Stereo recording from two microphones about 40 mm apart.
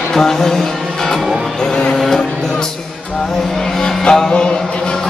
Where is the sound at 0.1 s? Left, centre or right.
Centre.